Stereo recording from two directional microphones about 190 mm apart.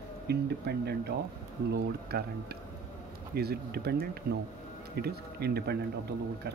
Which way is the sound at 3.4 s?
55° right (ahead or behind).